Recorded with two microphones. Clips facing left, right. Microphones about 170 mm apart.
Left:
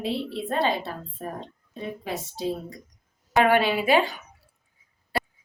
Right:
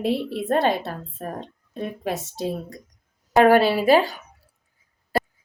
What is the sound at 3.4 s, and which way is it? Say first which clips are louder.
Speech: right 5 dB; 40° right (ahead or behind).